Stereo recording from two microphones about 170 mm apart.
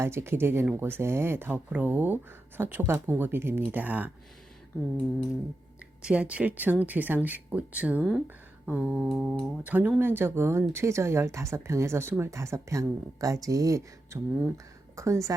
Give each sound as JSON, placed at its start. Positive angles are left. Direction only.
{"t": 0.0, "sound": "speech", "side_deg": -15}
{"t": 6.0, "sound": "speech", "side_deg": -5}
{"t": 8.6, "sound": "mantra", "side_deg": -10}
{"t": 8.9, "sound": "a sound", "side_deg": 0}
{"t": 9.6, "sound": "speech", "side_deg": -10}